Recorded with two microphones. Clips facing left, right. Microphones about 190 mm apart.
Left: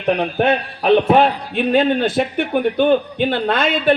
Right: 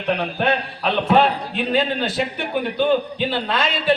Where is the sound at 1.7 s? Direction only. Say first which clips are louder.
Left 6 dB; 50° left (ahead or behind).